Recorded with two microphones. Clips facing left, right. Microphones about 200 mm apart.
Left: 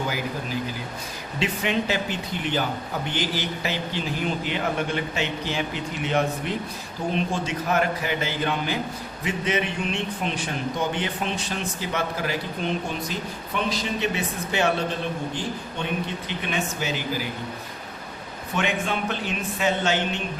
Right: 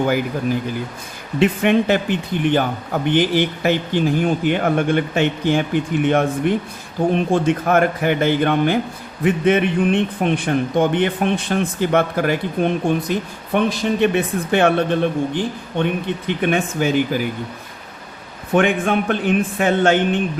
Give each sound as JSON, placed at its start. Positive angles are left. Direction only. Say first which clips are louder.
{"t": 1.4, "sound": "a man's voice", "louder": "right 10 dB", "side_deg": -55}
{"t": 18.5, "sound": "a man's voice", "louder": "right 10 dB", "side_deg": -55}